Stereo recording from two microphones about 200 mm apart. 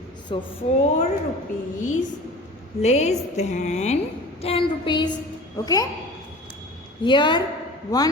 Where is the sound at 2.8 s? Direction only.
35° left (ahead or behind); by 5.9 s 20° left (ahead or behind).